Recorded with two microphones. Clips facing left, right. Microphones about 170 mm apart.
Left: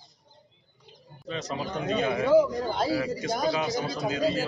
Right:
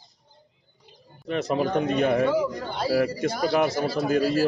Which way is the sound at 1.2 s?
65° right (ahead or behind).